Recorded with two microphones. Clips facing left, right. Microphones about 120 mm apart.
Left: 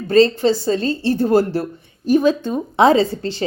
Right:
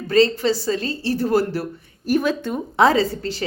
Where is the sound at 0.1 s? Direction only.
30° left (ahead or behind).